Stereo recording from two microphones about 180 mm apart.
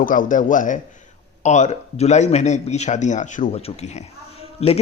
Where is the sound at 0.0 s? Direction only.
45° left (ahead or behind).